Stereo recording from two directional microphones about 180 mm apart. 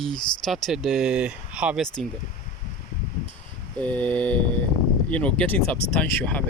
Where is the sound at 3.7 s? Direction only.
10° left (ahead or behind).